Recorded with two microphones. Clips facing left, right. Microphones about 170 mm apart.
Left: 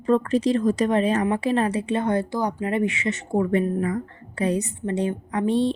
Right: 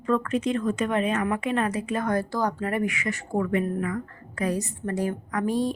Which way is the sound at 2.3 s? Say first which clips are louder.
Left 2 dB; 15° left (ahead or behind).